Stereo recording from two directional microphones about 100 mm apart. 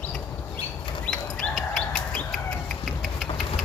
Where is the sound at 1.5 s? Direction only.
5° left (ahead or behind).